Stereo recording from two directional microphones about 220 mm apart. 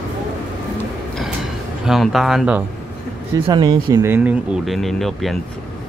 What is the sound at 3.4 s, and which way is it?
Speech, 20° right (ahead or behind).